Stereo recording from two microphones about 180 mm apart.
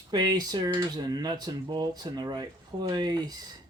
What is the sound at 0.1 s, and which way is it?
Speech, 25° right (ahead or behind).